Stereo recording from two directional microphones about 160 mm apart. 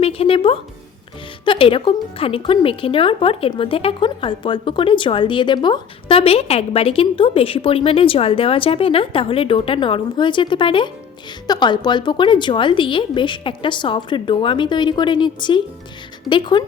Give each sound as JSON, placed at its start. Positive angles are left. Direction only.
{"t": 0.0, "sound": "a woman's voice", "side_deg": 35}